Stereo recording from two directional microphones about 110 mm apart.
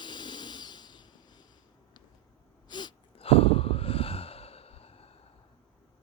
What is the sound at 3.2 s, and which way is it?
Sigh, 60° left (ahead or behind).